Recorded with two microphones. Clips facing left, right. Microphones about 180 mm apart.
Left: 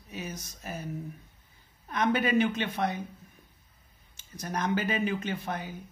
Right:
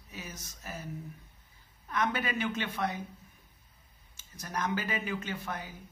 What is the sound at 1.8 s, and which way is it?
Speech, 20° left (ahead or behind).